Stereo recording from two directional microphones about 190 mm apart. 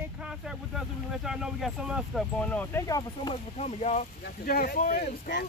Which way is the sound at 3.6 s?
35° left (ahead or behind).